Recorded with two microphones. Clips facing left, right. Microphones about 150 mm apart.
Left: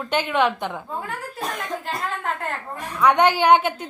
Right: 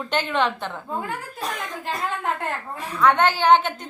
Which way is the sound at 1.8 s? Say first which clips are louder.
Right 1 dB; centre (ahead or behind).